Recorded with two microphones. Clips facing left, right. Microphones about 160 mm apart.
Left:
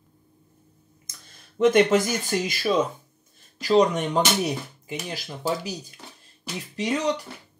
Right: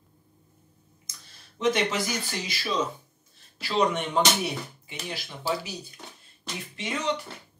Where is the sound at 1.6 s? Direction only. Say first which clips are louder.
Left 8 dB; 50° left (ahead or behind).